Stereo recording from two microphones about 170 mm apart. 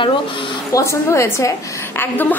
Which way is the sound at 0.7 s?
20° left (ahead or behind).